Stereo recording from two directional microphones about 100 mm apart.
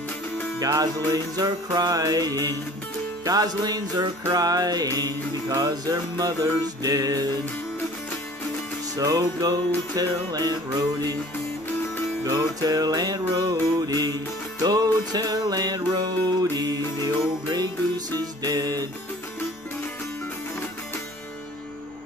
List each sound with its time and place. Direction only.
0.6 s music: 40° right (ahead or behind)
8.9 s music: 40° right (ahead or behind)
12.3 s music: 40° right (ahead or behind)